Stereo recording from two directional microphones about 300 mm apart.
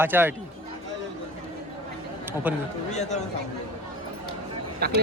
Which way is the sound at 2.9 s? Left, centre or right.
Left.